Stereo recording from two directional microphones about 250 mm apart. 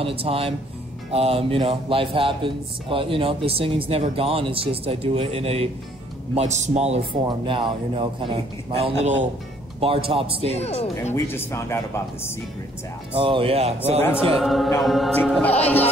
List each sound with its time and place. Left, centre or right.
0.0 s speech: right
10.5 s speech: left
11.1 s speech: centre
13.1 s speech: right
14.3 s music: centre